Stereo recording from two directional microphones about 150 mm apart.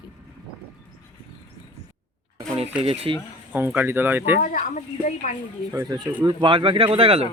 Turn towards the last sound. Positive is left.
turn(degrees=-40)  # may be behind; listen again after turning